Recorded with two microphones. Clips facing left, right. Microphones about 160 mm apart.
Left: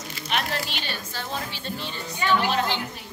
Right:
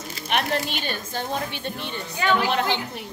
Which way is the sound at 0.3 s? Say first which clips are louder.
Right 4 dB; 50° right (ahead or behind).